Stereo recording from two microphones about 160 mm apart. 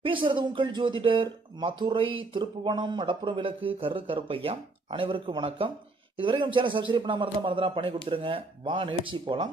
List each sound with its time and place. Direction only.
0.0 s speech: 30° right (ahead or behind)